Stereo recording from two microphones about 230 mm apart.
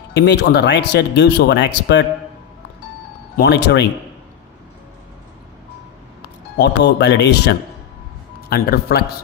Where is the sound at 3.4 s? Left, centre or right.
Left.